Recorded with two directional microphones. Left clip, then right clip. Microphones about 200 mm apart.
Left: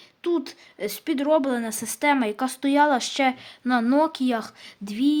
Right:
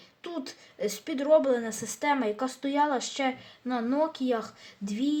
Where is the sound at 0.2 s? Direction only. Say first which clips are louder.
Left 12 dB; 35° left (ahead or behind).